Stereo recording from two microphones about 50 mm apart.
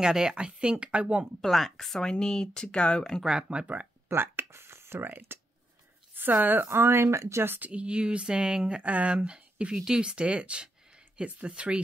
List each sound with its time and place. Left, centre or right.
0.0 s speech: centre
1.4 s speech: centre
3.3 s speech: centre
4.1 s speech: right
4.5 s a sound: right
5.0 s speech: right
6.4 s speech: right
7.4 s speech: right
7.7 s speech: right
8.8 s speech: right